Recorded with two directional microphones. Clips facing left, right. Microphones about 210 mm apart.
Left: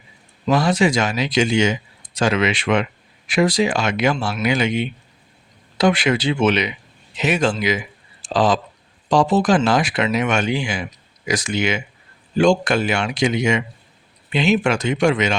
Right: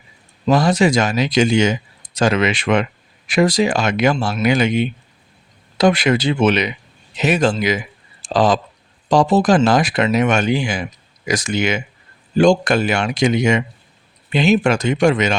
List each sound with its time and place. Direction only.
0.5 s speech: 40° right (ahead or behind)